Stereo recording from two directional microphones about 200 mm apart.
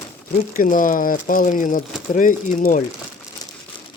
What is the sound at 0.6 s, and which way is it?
Speech, 45° left (ahead or behind).